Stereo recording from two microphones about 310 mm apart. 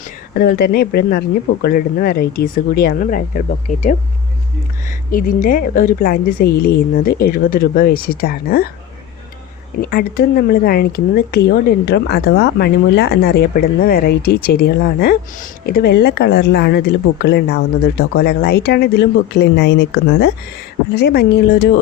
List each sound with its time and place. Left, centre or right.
0.3 s a woman's voice: left
9.8 s speech: left